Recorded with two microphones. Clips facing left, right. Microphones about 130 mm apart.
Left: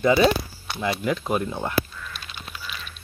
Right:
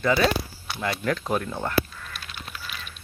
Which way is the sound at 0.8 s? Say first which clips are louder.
Left 2 dB; 10° left (ahead or behind).